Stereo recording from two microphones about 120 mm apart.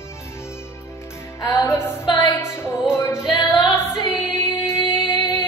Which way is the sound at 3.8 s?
70° right (ahead or behind).